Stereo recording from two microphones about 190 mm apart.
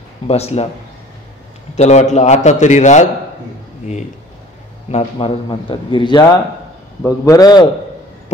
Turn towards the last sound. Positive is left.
turn(degrees=20)  # may be behind; listen again after turning